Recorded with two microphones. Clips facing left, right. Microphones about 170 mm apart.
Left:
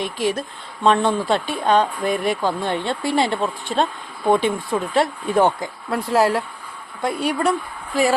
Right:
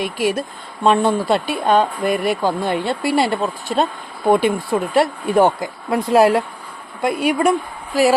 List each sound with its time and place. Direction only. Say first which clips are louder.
0.0 s speech: right 3 dB; 5° right (ahead or behind)